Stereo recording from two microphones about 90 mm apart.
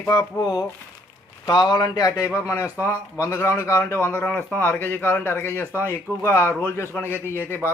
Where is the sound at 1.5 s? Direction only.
50° left (ahead or behind).